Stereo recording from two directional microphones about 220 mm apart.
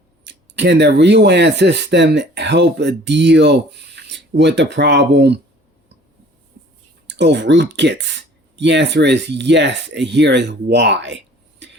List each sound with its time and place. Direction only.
0.3 s speech: 50° right (ahead or behind)
7.1 s speech: 50° right (ahead or behind)